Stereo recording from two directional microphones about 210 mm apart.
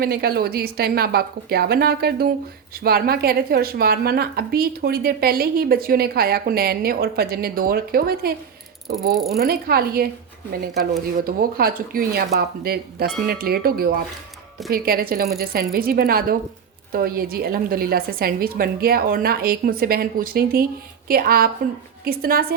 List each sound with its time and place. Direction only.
0.0 s a woman's voice: 45° right (ahead or behind)
11.3 s a woman's voice: 45° right (ahead or behind)